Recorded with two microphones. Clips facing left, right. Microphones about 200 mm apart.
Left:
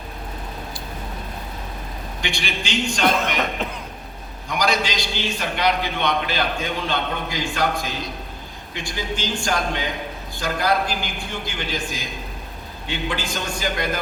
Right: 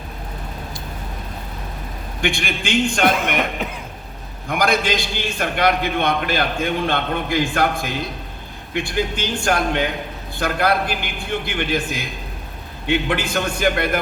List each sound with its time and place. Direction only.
2.2 s a man's voice: 50° right (ahead or behind)
4.4 s a man's voice: 55° right (ahead or behind)